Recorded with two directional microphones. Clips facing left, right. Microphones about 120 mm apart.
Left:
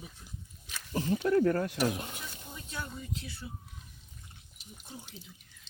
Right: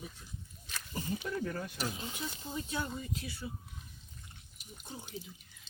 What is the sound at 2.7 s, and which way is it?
Speech, 10° right (ahead or behind).